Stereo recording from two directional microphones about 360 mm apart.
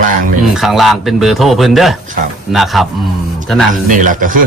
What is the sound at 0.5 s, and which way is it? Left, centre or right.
Speech, centre.